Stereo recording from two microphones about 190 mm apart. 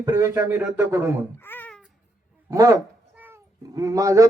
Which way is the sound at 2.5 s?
20° right (ahead or behind).